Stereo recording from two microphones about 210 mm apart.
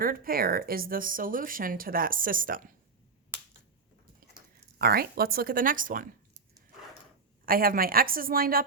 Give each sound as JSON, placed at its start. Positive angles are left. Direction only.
{"t": 0.0, "sound": "speech", "side_deg": -45}
{"t": 3.3, "sound": "finger snapping", "side_deg": -10}
{"t": 4.8, "sound": "speech", "side_deg": -45}
{"t": 7.4, "sound": "speech", "side_deg": -45}